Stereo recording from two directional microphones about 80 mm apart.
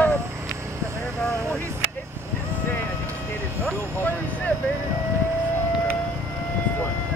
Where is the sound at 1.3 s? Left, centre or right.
Right.